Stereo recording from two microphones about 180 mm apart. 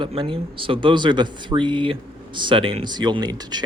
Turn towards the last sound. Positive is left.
turn(degrees=-20)  # may be behind; listen again after turning